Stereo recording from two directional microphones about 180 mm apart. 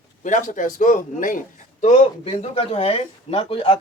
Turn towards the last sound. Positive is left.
turn(degrees=30)  # may be behind; listen again after turning